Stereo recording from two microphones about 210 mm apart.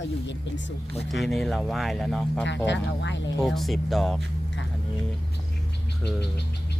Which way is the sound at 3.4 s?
Centre (ahead or behind).